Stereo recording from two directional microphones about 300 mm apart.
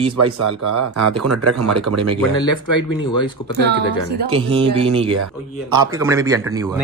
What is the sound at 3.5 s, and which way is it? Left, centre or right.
Speech, right.